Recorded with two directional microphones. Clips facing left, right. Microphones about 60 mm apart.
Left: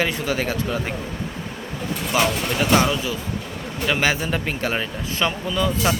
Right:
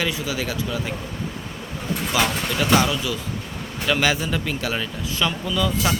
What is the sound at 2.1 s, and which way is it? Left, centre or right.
Speech, left.